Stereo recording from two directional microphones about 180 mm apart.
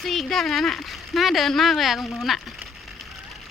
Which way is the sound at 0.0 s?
Centre (ahead or behind).